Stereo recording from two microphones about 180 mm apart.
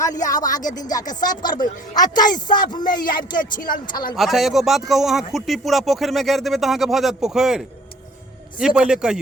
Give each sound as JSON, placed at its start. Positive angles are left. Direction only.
{"t": 0.3, "sound": "speech", "side_deg": 45}
{"t": 0.8, "sound": "speech", "side_deg": 20}
{"t": 3.0, "sound": "speech", "side_deg": 50}
{"t": 4.1, "sound": "speech", "side_deg": 0}